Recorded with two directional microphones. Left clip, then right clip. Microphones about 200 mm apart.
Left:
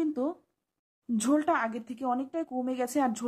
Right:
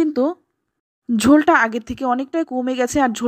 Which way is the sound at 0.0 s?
30° right (ahead or behind).